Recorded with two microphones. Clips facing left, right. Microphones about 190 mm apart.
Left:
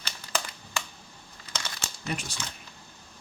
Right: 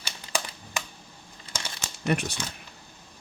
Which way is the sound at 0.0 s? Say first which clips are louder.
Right 1 dB; 10° right (ahead or behind).